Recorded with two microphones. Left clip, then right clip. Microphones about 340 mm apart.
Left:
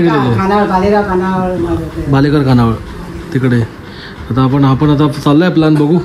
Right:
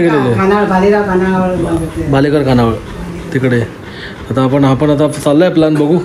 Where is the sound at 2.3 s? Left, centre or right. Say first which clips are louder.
Right 1 dB; centre.